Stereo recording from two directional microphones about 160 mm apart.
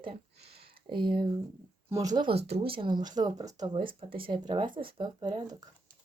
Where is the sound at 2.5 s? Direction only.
35° right (ahead or behind).